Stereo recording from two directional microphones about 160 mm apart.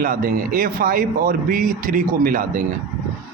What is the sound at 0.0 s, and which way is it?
Speech, 60° right (ahead or behind).